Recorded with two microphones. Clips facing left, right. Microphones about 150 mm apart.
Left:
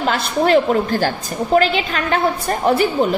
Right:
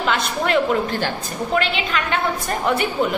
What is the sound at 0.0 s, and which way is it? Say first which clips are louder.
A woman's voice: left 4 dB; 35° left (ahead or behind).